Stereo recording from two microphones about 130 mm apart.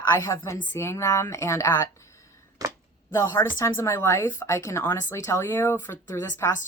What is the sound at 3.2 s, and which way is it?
A woman's voice, 20° left (ahead or behind).